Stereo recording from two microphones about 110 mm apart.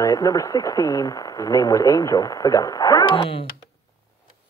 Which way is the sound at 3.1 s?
50° left (ahead or behind).